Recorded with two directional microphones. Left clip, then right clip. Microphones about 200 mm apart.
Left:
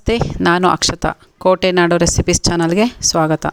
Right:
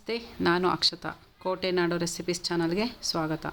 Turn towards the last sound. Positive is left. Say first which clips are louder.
# left 15 dB
turn(degrees=45)  # may be behind; listen again after turning